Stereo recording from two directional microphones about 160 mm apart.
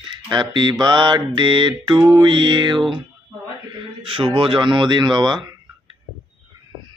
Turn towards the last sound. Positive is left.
turn(degrees=-25)  # may be behind; listen again after turning